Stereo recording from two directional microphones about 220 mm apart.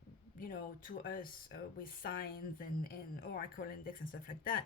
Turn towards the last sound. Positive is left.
turn(degrees=40)  # may be behind; listen again after turning